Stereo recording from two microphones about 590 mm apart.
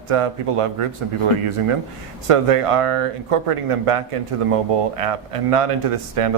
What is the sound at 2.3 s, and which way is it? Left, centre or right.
A man's voice, right.